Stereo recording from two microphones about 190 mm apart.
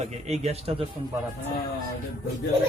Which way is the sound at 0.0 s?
35° right (ahead or behind).